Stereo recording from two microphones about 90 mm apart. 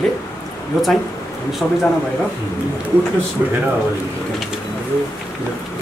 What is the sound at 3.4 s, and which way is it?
Speech, 20° right (ahead or behind).